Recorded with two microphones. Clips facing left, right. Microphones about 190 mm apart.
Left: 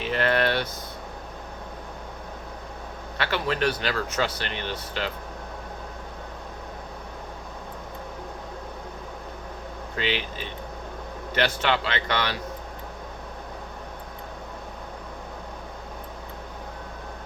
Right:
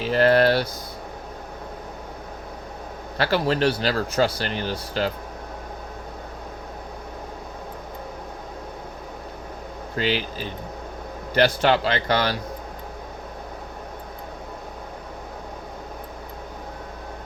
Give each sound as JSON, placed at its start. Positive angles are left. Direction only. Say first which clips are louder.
{"t": 0.0, "sound": "a sound", "louder": "right 6 dB", "side_deg": -35}
{"t": 3.2, "sound": "speech", "louder": "right 5 dB", "side_deg": -35}
{"t": 9.9, "sound": "speech", "louder": "right 4 dB", "side_deg": -40}